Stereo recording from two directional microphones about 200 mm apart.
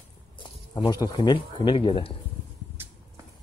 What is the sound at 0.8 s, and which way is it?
Speech, 20° left (ahead or behind).